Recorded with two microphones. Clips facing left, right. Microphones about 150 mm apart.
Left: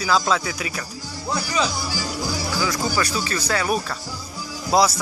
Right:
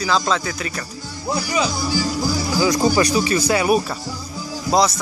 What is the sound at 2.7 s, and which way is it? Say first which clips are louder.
Speech: right 7 dB; 20° right (ahead or behind).